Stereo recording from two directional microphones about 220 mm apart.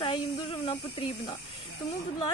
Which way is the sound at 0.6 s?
25° left (ahead or behind).